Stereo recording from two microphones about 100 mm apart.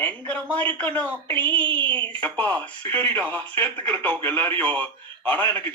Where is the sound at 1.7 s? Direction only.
55° right (ahead or behind).